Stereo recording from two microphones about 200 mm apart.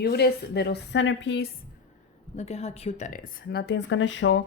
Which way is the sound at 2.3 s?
30° left (ahead or behind).